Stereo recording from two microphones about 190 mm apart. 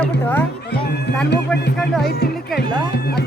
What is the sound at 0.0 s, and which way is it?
Music, 10° left (ahead or behind).